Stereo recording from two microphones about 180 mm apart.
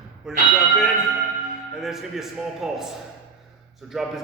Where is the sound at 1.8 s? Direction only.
Centre (ahead or behind).